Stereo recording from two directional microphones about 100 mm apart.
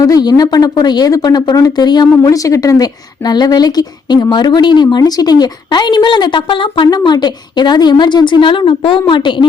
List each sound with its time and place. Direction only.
0.0 s speech: 40° left (ahead or behind); by 6.8 s 55° left (ahead or behind)
6.8 s speech: 45° left (ahead or behind)